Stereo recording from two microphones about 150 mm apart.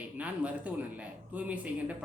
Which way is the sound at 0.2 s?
10° right (ahead or behind).